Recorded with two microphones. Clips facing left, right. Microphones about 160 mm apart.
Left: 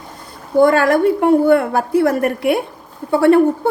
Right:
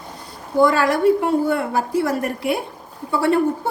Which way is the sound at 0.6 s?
55° left (ahead or behind).